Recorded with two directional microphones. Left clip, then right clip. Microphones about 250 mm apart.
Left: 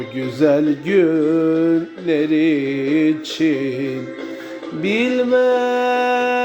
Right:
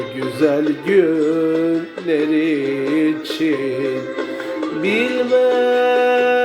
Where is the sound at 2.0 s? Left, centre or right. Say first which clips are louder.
Even; left.